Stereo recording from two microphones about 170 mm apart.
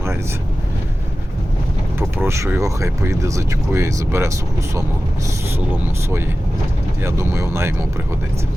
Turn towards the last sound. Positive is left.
turn(degrees=-15)  # may be behind; listen again after turning